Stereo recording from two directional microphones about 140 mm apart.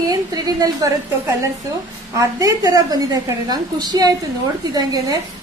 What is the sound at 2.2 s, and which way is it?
A woman's voice, 25° right (ahead or behind).